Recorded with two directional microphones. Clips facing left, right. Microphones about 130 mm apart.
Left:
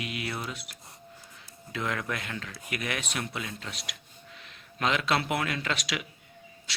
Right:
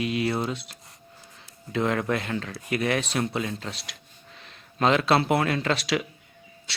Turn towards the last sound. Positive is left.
turn(degrees=-30)  # may be behind; listen again after turning